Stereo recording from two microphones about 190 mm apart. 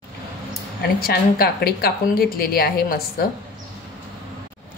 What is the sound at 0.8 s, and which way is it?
A woman's voice, 55° left (ahead or behind).